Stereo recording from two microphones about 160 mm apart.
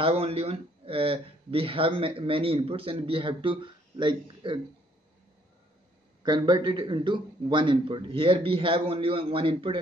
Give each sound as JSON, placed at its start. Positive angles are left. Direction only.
{"t": 0.0, "sound": "speech", "side_deg": -40}
{"t": 6.2, "sound": "speech", "side_deg": -30}